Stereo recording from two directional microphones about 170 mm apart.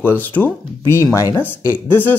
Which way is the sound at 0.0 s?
10° left (ahead or behind).